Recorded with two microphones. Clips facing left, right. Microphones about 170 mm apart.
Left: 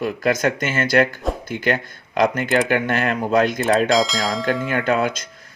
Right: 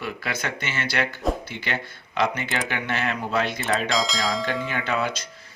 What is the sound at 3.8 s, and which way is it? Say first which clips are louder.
Speech: left 6 dB; centre (ahead or behind).